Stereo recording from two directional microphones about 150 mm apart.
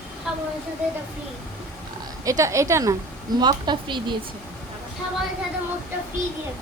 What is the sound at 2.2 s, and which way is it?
A woman's voice, 20° right (ahead or behind).